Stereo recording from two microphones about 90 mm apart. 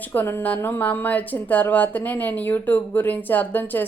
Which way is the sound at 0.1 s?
25° left (ahead or behind).